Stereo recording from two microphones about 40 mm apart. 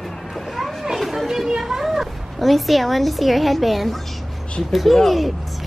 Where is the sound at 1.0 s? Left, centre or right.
Centre.